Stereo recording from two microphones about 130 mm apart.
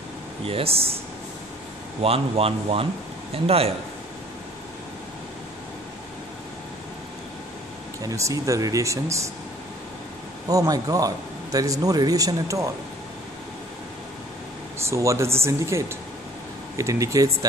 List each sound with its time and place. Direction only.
0.5 s speech: 50° right (ahead or behind)
2.0 s speech: 45° right (ahead or behind)
8.2 s speech: 25° right (ahead or behind)
10.5 s speech: 25° right (ahead or behind)
14.9 s speech: 20° right (ahead or behind)